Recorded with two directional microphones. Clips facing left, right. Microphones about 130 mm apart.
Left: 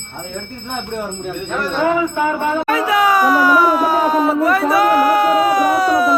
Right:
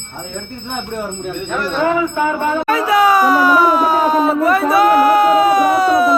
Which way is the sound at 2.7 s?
35° right (ahead or behind).